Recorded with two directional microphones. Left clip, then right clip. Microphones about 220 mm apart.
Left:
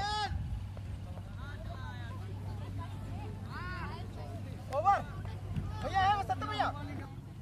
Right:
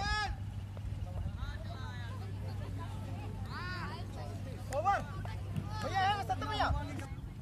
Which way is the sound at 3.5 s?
50° right (ahead or behind).